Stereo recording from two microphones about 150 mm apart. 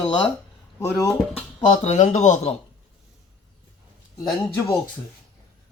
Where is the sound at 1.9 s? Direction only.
55° left (ahead or behind).